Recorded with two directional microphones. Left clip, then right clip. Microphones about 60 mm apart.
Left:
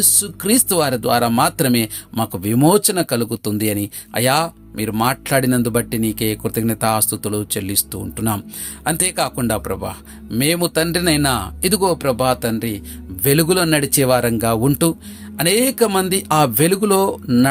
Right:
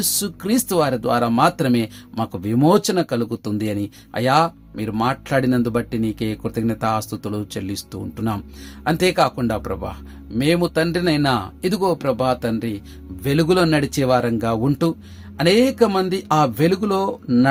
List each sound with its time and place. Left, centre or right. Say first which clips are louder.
0.0 s speech: left 4 dB; centre
0.4 s speech: left 2 dB; left
11.8 s speech: left 2 dB; centre
13.2 s speech: left 1 dB; left